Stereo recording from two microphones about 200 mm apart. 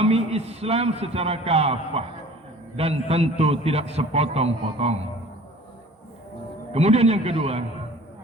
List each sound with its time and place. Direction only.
0.0 s a man's voice: 30° right (ahead or behind)
6.7 s a man's voice: 30° right (ahead or behind)